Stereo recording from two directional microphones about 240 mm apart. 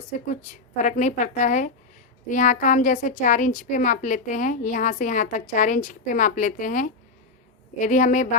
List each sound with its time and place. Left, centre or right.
0.8 s a woman's voice: left